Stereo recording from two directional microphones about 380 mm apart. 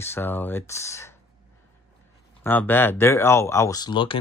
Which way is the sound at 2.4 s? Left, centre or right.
Centre.